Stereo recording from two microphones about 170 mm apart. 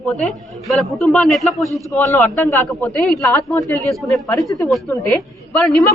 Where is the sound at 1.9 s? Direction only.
10° left (ahead or behind).